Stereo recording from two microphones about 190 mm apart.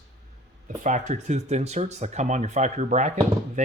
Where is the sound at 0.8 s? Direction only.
40° right (ahead or behind).